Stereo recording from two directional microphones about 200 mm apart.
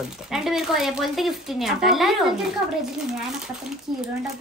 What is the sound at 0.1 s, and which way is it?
Speech, centre (ahead or behind).